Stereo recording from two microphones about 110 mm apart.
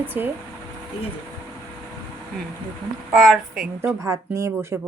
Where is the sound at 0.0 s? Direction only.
20° right (ahead or behind).